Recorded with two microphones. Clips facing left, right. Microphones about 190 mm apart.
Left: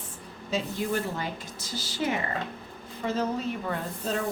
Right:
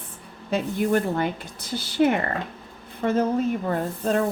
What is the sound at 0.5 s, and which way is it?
A woman's voice, 55° right (ahead or behind).